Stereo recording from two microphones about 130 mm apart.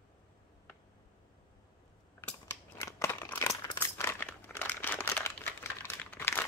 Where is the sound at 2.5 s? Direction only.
20° left (ahead or behind).